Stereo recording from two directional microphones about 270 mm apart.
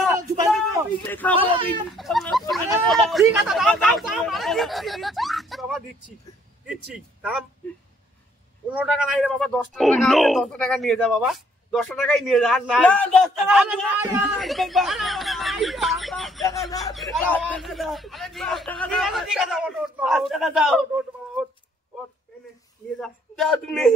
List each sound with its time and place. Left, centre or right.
1.0 s speech: centre
1.3 s speech: centre
1.9 s speech: centre
8.6 s speech: centre
22.9 s a man's voice: centre